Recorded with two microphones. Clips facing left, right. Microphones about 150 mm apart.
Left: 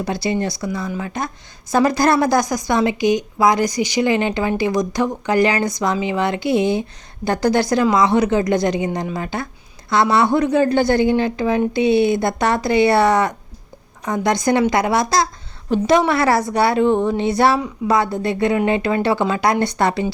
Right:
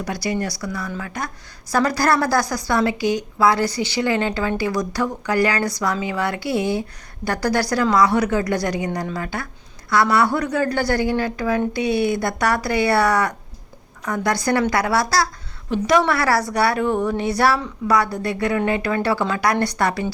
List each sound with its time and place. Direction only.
0.0 s a woman's voice: 25° left (ahead or behind)